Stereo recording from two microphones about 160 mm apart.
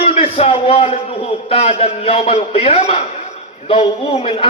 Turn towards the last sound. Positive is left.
turn(degrees=35)  # may be behind; listen again after turning